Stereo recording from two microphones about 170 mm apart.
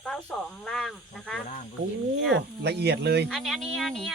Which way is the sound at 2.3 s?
75° right (ahead or behind).